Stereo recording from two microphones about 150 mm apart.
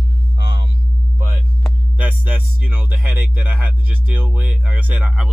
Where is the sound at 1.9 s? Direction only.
10° right (ahead or behind).